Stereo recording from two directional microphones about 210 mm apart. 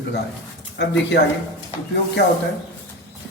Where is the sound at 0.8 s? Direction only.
50° left (ahead or behind).